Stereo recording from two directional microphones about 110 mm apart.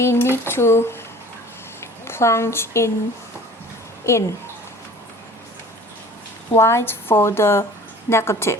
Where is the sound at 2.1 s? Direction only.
25° left (ahead or behind).